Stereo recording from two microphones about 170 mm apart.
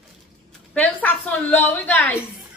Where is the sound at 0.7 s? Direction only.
10° left (ahead or behind).